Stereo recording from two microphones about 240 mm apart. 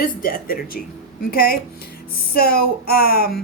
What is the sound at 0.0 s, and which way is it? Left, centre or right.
A woman's voice, left.